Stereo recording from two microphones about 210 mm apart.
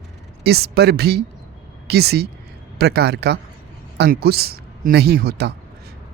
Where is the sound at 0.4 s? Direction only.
50° right (ahead or behind).